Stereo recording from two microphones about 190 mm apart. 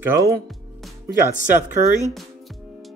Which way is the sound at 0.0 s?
15° right (ahead or behind).